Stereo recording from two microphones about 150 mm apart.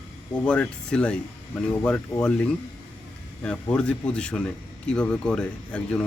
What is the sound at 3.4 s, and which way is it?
Speech, 5° left (ahead or behind).